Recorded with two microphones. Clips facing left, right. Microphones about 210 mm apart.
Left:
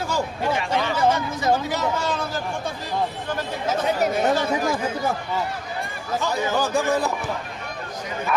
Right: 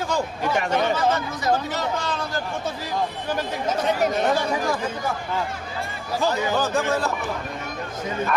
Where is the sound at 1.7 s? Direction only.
5° left (ahead or behind).